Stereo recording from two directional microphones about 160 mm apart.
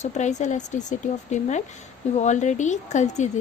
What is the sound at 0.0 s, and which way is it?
A woman's voice, 45° left (ahead or behind).